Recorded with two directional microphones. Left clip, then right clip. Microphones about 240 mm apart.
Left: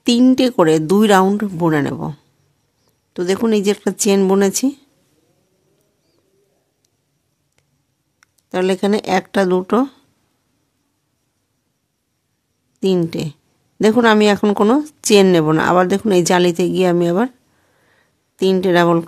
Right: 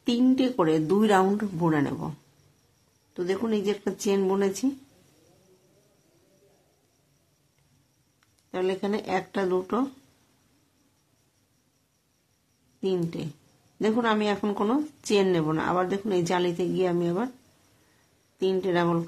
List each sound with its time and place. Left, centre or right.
0.0 s speech: left
8.2 s speech: left
12.8 s speech: left
18.4 s speech: left